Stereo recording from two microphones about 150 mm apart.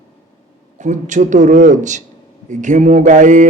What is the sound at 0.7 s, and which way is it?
A man's voice, 55° right (ahead or behind).